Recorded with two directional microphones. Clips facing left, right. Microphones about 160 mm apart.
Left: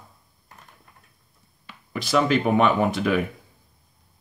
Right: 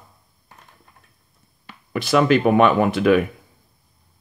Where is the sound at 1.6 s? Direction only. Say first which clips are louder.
Right 6 dB; 60° right (ahead or behind).